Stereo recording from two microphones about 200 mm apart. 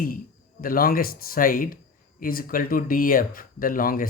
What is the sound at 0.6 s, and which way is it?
Speech, 45° left (ahead or behind).